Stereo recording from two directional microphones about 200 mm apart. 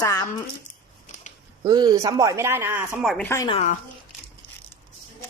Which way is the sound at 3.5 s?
35° left (ahead or behind).